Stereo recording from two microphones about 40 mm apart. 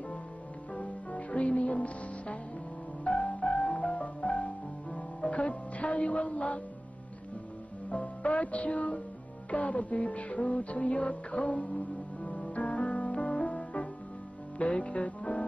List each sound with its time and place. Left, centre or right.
0.7 s music: left
7.9 s music: left